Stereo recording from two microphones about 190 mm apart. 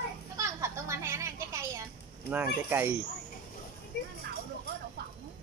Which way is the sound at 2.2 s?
10° right (ahead or behind).